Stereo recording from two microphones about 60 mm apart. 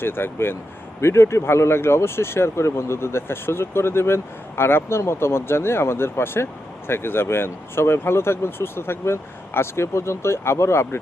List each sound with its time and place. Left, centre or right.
0.0 s speech: left
1.0 s speech: left